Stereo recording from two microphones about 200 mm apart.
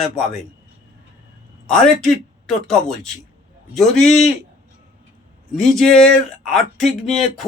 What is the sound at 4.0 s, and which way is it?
Speech, 35° left (ahead or behind).